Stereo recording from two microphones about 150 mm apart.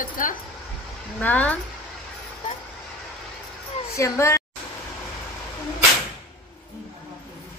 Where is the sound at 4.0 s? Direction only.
20° left (ahead or behind).